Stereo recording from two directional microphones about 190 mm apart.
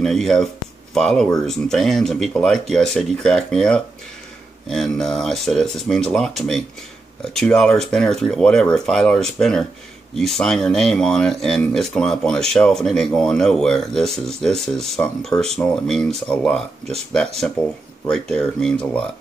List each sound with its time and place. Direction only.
0.0 s speech: centre (ahead or behind)